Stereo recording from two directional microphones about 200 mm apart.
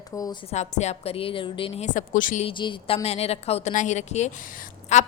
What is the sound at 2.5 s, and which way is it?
A woman's voice, 25° left (ahead or behind).